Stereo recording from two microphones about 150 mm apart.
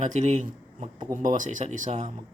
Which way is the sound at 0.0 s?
55° right (ahead or behind).